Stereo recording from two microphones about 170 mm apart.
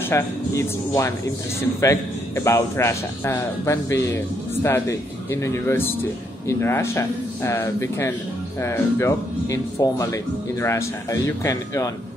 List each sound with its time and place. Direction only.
0.1 s speech: 15° left (ahead or behind)